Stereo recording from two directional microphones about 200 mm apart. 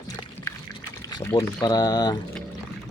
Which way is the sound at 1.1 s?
15° left (ahead or behind).